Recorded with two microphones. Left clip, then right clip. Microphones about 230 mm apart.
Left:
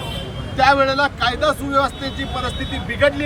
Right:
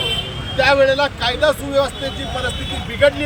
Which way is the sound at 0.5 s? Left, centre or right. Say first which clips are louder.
Right 1 dB; centre.